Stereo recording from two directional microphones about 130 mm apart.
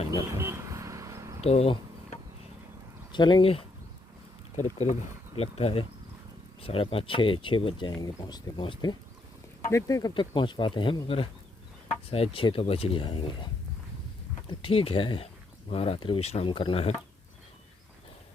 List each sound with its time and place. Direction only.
0.1 s vehicle: 20° right (ahead or behind)
1.5 s speech: 50° left (ahead or behind)
3.1 s speech: 35° left (ahead or behind)
4.5 s speech: 65° left (ahead or behind)
5.4 s speech: 55° left (ahead or behind); by 9.0 s 35° left (ahead or behind)
9.6 s speech: 25° left (ahead or behind); by 16.9 s 45° left (ahead or behind)